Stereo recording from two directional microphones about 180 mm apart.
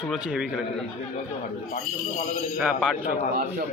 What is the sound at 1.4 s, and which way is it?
Speech, 40° left (ahead or behind).